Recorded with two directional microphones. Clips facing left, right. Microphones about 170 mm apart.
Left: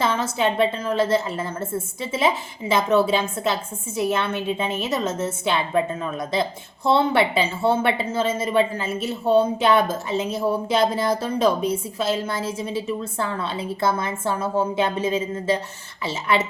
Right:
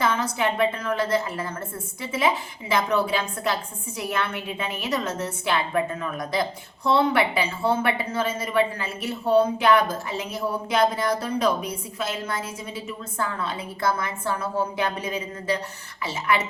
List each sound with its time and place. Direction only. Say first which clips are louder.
0.0 s a woman's voice: left 2 dB; 25° left (ahead or behind)